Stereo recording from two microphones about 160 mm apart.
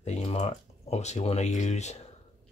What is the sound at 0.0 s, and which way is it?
Speech, 40° left (ahead or behind).